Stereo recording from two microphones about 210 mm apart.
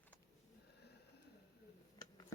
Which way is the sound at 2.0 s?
20° left (ahead or behind).